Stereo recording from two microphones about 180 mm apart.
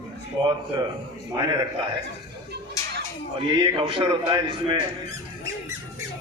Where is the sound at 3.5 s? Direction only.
25° right (ahead or behind).